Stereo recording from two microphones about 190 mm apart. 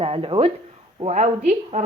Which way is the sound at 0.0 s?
30° right (ahead or behind).